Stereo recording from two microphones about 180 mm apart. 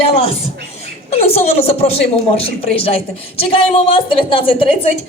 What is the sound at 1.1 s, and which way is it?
Speech, 35° left (ahead or behind).